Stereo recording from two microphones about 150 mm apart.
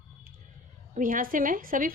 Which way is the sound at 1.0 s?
65° right (ahead or behind).